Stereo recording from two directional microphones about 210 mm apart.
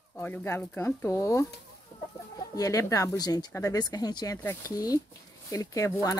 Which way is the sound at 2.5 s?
15° left (ahead or behind).